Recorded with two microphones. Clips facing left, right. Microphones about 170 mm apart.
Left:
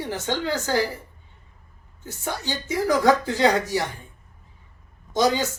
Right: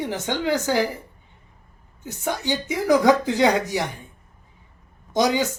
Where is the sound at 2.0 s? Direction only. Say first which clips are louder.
Right 4 dB; 20° right (ahead or behind).